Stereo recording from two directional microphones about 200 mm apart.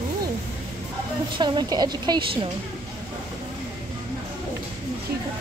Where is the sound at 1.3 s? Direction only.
20° right (ahead or behind).